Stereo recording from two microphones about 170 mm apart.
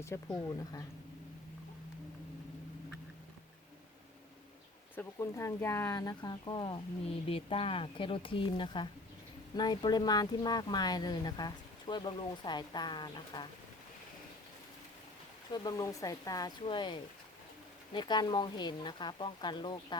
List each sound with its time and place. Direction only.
0.0 s speech: 15° left (ahead or behind)
4.9 s speech: 20° left (ahead or behind)
15.5 s speech: 20° left (ahead or behind)